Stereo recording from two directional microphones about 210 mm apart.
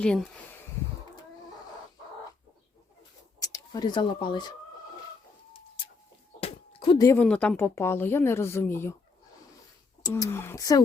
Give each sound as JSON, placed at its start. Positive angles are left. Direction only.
{"t": 0.0, "sound": "speech", "side_deg": 5}
{"t": 3.4, "sound": "speech", "side_deg": 20}
{"t": 6.4, "sound": "a sound", "side_deg": 25}
{"t": 7.1, "sound": "speech", "side_deg": 5}
{"t": 10.0, "sound": "speech", "side_deg": 15}